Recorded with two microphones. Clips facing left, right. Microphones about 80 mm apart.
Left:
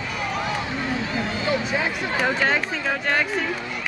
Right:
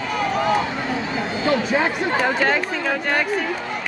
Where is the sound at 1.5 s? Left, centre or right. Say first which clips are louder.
Right 6 dB; right.